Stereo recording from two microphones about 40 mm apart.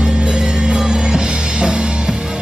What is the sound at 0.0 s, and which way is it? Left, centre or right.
Music, right.